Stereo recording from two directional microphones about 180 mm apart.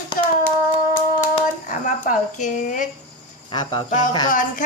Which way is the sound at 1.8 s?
45° left (ahead or behind).